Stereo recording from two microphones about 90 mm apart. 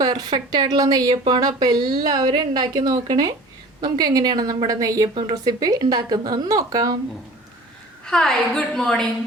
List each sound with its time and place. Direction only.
0.0 s a woman's voice: 45° right (ahead or behind)
8.0 s a woman's voice: 5° left (ahead or behind)